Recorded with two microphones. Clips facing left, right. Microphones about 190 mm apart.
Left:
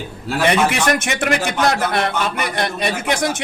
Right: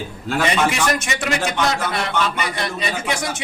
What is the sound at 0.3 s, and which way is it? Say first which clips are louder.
Speech: left 3 dB; 5° left (ahead or behind).